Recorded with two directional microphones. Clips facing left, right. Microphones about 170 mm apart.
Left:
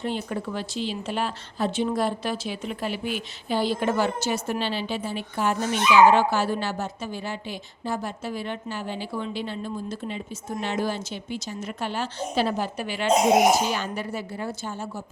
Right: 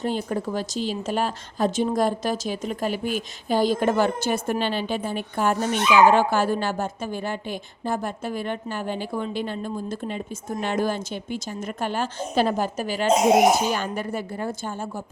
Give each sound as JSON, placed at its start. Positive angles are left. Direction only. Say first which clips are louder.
{"t": 0.0, "sound": "a woman's voice", "louder": "right 3 dB", "side_deg": -40}